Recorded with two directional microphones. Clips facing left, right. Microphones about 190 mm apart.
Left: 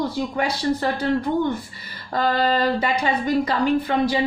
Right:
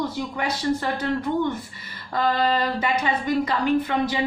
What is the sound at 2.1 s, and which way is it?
Speech, 35° left (ahead or behind).